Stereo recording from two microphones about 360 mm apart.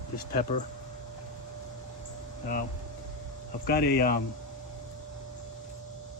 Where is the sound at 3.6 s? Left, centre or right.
Left.